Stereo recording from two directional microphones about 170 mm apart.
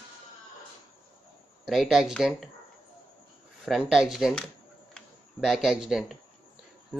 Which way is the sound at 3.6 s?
Centre (ahead or behind).